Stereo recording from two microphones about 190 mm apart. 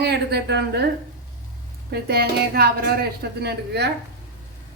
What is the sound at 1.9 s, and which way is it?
A woman's voice, 55° right (ahead or behind).